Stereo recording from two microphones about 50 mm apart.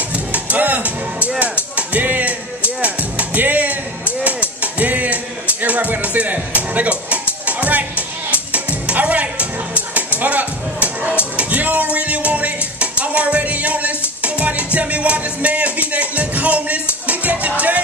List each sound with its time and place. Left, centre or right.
0.1 s music: right